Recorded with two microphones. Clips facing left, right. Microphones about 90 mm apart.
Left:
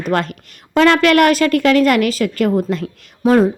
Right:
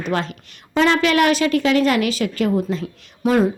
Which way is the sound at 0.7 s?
65° left (ahead or behind).